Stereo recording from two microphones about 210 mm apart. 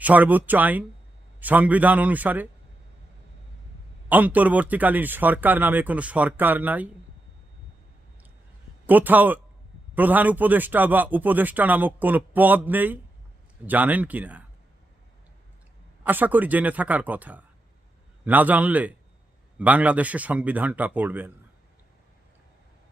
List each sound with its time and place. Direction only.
0.0 s a man's voice: 5° right (ahead or behind)
4.1 s a man's voice: 10° right (ahead or behind)
8.9 s a man's voice: 10° right (ahead or behind)
16.0 s a man's voice: 10° right (ahead or behind)